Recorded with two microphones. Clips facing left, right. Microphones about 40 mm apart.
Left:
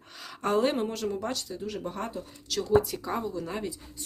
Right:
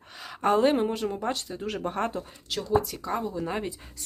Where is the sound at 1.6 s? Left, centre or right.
Right.